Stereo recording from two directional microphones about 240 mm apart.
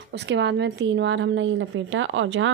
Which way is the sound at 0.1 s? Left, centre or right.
Right.